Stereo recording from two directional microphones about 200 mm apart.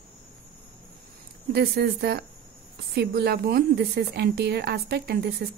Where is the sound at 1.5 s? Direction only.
55° right (ahead or behind).